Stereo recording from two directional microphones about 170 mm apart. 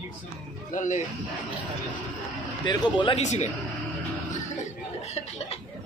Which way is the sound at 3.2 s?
45° left (ahead or behind).